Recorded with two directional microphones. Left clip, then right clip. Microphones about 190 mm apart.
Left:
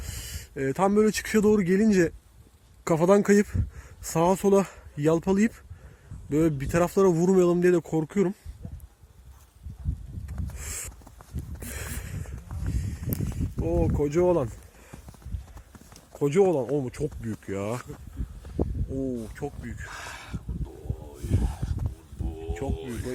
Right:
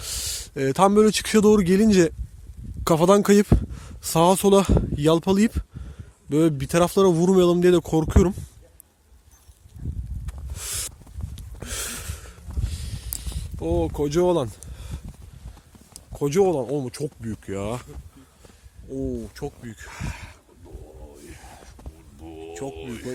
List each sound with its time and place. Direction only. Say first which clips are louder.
0.3 s a man's voice: right 6 dB; 25° right (ahead or behind)
5.1 s speech: right 4 dB; 30° right (ahead or behind)
6.2 s a man's voice: right 4 dB; 20° right (ahead or behind); by 8.4 s 35° right (ahead or behind)
10.2 s a sound: right 5 dB; 35° right (ahead or behind)
13.6 s speech: right 2 dB; 35° right (ahead or behind)
16.1 s a man's voice: right 2 dB; 30° right (ahead or behind)
18.9 s speech: right 2 dB; 15° right (ahead or behind)
19.4 s speech: right 1 dB; 35° right (ahead or behind)
21.4 s a sound: left 6 dB; 35° right (ahead or behind)
22.3 s speech: right 1 dB; 45° right (ahead or behind)